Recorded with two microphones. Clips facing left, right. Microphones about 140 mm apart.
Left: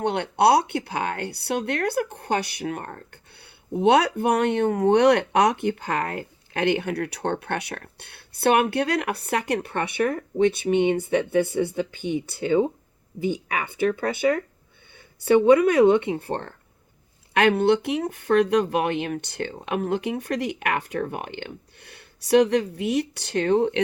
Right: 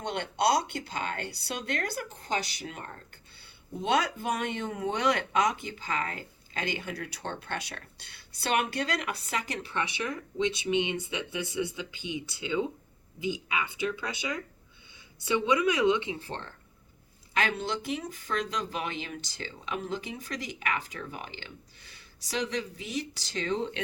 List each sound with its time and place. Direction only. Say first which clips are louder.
0.0 s speech: left 8 dB; 60° left (ahead or behind)